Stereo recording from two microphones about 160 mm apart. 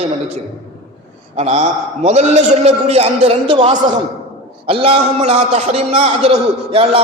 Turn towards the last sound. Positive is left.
turn(degrees=-35)  # may be behind; listen again after turning